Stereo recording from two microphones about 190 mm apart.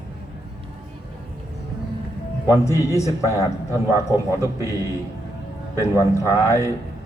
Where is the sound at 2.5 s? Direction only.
15° left (ahead or behind).